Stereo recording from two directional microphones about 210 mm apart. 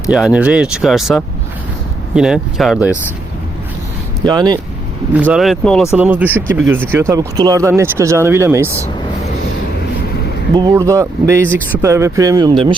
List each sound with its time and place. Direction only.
0.1 s speech: 5° right (ahead or behind)
4.2 s speech: 20° right (ahead or behind)
5.1 s speech: 5° right (ahead or behind)
10.5 s speech: 20° right (ahead or behind)